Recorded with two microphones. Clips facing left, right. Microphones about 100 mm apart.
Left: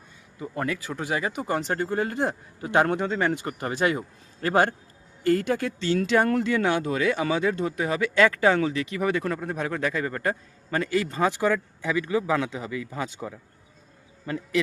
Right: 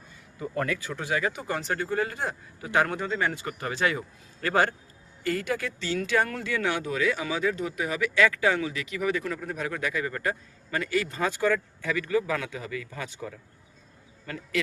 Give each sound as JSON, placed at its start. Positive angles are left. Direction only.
{"t": 0.5, "sound": "a man's voice", "side_deg": 20}
{"t": 5.6, "sound": "speech", "side_deg": 45}
{"t": 6.3, "sound": "speech", "side_deg": 30}